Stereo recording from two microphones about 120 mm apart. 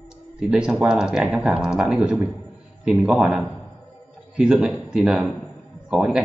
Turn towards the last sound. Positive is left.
turn(degrees=-5)  # may be behind; listen again after turning